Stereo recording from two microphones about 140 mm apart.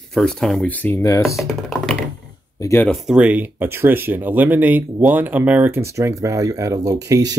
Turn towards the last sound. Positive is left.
turn(degrees=-25)  # may be behind; listen again after turning